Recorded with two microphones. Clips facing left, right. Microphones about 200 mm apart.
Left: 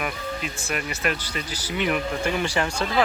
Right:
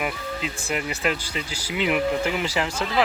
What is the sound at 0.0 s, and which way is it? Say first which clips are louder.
Speech: right 1 dB; 20° right (ahead or behind).